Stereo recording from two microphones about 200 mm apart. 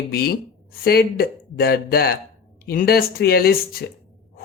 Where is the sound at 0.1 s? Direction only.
50° left (ahead or behind).